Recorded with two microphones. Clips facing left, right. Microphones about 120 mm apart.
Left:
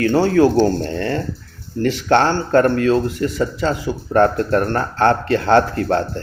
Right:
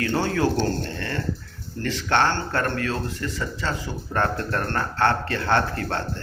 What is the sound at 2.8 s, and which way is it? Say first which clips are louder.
Speech: left 11 dB; 20° left (ahead or behind).